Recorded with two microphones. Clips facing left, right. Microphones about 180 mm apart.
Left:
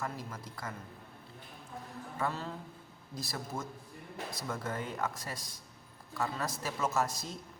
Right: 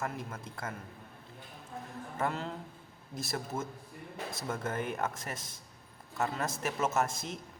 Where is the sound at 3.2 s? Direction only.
25° right (ahead or behind).